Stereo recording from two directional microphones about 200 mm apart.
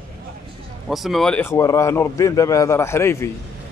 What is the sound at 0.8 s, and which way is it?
Speech, centre (ahead or behind).